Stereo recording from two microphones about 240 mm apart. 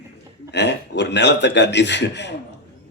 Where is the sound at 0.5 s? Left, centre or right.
Left.